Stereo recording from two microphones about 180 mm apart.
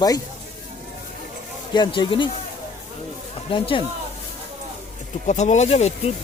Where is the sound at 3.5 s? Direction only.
30° left (ahead or behind).